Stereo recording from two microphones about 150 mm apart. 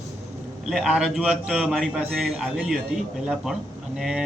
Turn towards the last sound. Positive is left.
turn(degrees=-5)  # may be behind; listen again after turning